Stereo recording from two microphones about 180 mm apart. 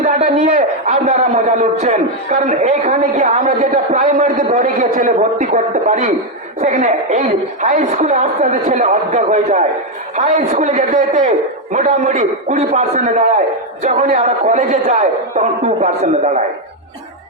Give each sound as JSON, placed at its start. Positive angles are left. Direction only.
{"t": 0.0, "sound": "a man's voice", "side_deg": -45}